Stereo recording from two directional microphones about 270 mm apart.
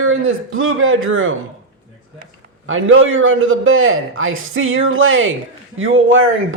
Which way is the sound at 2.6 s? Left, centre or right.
Right.